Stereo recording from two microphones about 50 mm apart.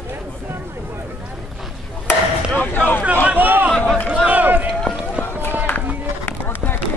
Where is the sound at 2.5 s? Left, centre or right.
Left.